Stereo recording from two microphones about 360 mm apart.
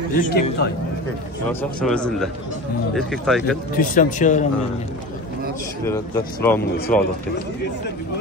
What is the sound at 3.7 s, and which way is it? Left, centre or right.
Speech, left.